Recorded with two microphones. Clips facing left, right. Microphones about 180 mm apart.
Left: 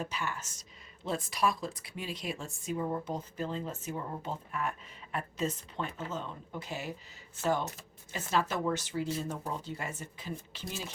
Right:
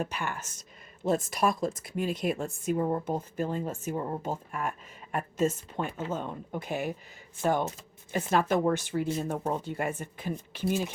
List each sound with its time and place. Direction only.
0.0 s speech: 55° right (ahead or behind)
8.1 s speech: 55° right (ahead or behind)